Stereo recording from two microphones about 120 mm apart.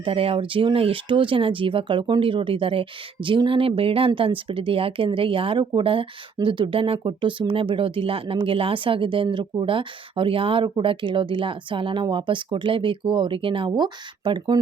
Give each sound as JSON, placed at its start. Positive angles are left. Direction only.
{"t": 0.0, "sound": "speech", "side_deg": -50}